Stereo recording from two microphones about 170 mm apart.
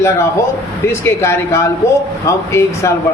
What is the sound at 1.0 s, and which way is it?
A man's voice, 15° left (ahead or behind).